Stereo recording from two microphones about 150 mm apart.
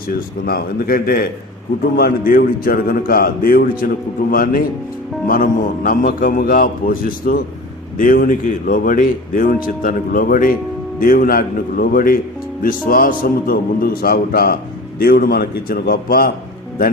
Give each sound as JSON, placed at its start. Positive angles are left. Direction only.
{"t": 0.4, "sound": "a man's voice", "side_deg": 80}